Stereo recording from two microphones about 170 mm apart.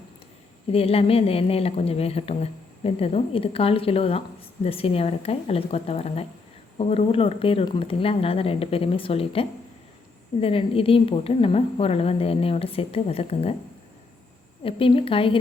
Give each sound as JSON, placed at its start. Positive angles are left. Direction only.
{"t": 0.7, "sound": "a woman's voice", "side_deg": 35}
{"t": 14.6, "sound": "a woman's voice", "side_deg": 30}